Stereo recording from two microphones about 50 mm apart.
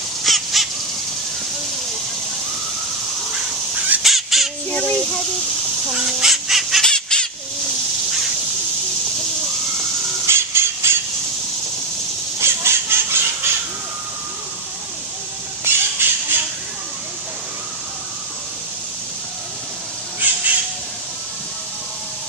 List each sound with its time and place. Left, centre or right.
0.2 s crow: centre
4.0 s fowl: centre
4.6 s a sound: left
5.9 s fowl: centre
6.8 s squawk: centre
10.2 s a sound: right
12.4 s a sound: right
15.6 s squawk: right
20.2 s bird: right